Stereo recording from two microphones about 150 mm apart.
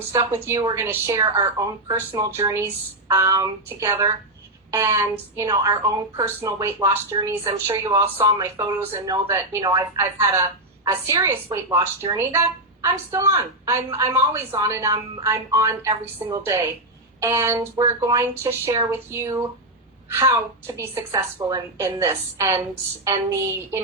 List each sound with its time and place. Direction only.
0.4 s speech: 20° right (ahead or behind)